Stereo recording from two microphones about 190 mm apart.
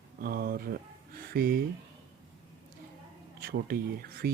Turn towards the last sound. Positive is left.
turn(degrees=-55)  # may be behind; listen again after turning